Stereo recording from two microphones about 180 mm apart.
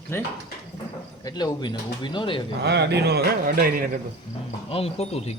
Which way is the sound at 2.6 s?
65° right (ahead or behind).